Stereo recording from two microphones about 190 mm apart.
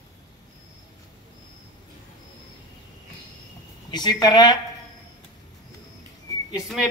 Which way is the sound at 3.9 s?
20° left (ahead or behind).